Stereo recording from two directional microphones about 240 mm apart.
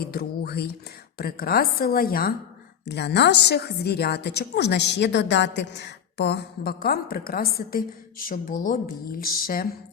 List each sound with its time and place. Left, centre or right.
0.0 s a woman's voice: left